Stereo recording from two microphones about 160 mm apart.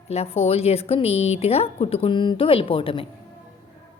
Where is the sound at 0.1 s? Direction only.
40° left (ahead or behind).